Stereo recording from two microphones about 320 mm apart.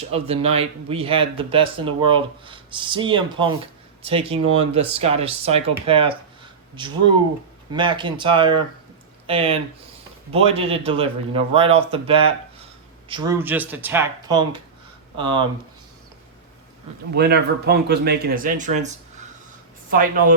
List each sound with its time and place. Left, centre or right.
0.1 s a man's voice: centre
17.2 s speech: right